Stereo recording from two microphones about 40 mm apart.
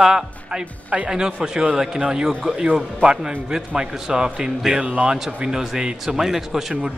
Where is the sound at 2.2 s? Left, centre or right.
Centre.